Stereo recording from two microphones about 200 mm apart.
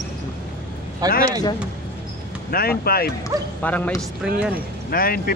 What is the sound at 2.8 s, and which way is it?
Speech, 50° left (ahead or behind).